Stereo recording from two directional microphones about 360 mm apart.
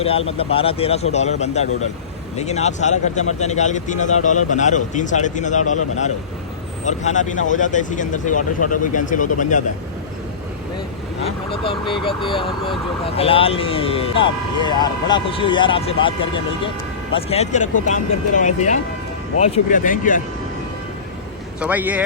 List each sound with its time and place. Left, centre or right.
0.3 s speech: centre
6.8 s speech: centre
11.5 s speech: centre
13.1 s speech: centre
21.6 s speech: centre